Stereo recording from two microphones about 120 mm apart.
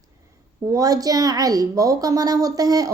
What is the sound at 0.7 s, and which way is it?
A woman's voice, 30° right (ahead or behind).